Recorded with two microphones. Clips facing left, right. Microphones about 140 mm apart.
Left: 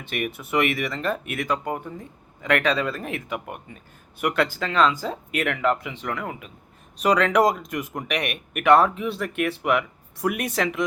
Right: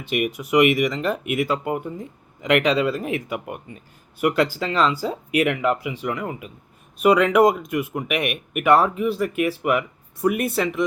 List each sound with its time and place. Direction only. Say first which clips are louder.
0.3 s speech: right 7 dB; 15° right (ahead or behind)